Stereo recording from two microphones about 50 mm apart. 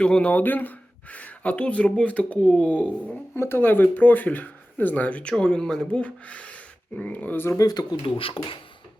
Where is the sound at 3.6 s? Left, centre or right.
Left; by 6.0 s centre.